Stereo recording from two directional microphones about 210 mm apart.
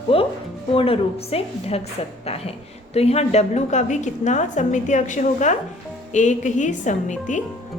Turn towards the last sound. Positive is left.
turn(degrees=35)  # may be behind; listen again after turning